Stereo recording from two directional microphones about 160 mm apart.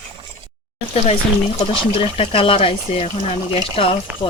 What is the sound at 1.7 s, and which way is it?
Speech, 35° left (ahead or behind).